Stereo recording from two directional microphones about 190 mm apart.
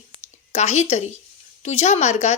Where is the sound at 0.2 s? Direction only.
35° left (ahead or behind).